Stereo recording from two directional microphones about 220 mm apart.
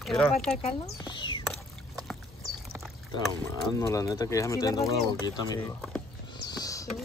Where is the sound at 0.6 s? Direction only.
20° left (ahead or behind).